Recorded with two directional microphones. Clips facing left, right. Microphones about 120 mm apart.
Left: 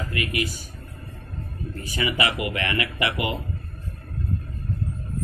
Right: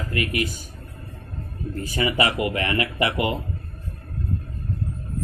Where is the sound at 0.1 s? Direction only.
45° right (ahead or behind).